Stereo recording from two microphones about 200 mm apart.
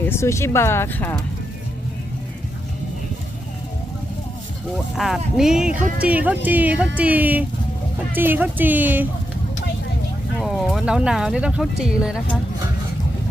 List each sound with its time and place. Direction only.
0.1 s speech: 15° left (ahead or behind)
4.9 s speech: centre (ahead or behind)
10.4 s speech: centre (ahead or behind)